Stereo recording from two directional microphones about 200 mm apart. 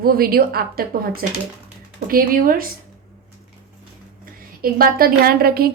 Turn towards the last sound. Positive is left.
turn(degrees=-50)  # may be behind; listen again after turning